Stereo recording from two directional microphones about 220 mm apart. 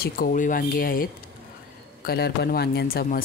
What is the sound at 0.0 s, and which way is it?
A woman's voice, 40° left (ahead or behind).